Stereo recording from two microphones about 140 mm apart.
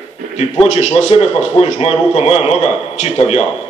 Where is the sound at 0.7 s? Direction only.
55° left (ahead or behind).